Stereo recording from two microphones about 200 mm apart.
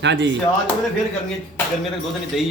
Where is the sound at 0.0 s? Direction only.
60° right (ahead or behind).